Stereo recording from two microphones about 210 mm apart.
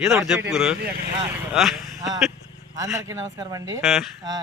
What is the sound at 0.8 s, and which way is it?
Speech, 50° right (ahead or behind).